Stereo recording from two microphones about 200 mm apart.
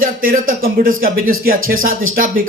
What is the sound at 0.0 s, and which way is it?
Speech, 45° right (ahead or behind).